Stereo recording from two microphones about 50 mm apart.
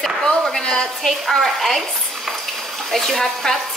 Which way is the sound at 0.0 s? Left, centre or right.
Centre.